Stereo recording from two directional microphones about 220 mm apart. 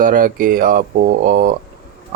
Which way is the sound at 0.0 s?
40° right (ahead or behind).